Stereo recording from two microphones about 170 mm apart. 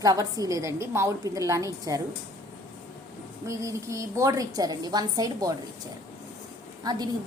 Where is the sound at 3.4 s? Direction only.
20° right (ahead or behind).